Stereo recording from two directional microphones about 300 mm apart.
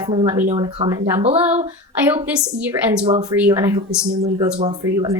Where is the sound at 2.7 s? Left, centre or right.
Centre.